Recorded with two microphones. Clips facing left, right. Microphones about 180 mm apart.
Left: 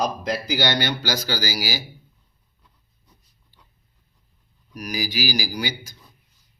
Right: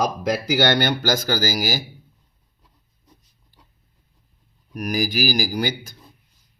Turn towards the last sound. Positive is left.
turn(degrees=-50)  # may be behind; listen again after turning